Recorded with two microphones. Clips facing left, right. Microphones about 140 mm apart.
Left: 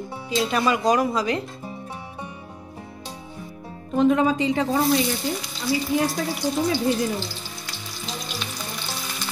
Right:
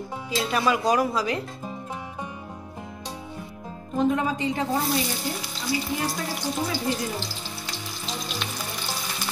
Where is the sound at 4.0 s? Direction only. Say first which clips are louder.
Left 5 dB; 90° left.